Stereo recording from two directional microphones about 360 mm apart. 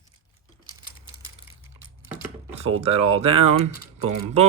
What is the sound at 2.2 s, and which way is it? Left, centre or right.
Typing, centre.